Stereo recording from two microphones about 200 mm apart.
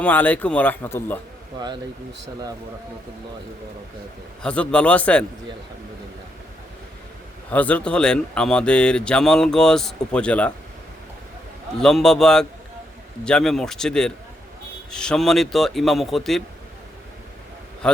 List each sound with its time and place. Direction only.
0.0 s speech: 10° left (ahead or behind)
1.5 s speech: 20° right (ahead or behind)
4.4 s speech: 5° left (ahead or behind)
7.5 s speech: 5° left (ahead or behind)
11.8 s speech: centre (ahead or behind)
17.8 s speech: 5° left (ahead or behind)